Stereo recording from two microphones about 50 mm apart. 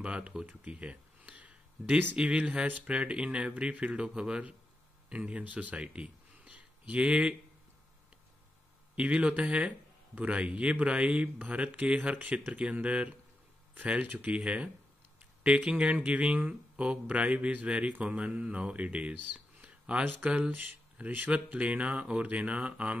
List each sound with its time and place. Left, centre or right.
0.0 s speech: right
0.7 s a sound: right
2.1 s speech: right
8.9 s speech: right